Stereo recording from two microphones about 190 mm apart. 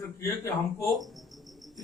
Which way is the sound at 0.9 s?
Centre (ahead or behind).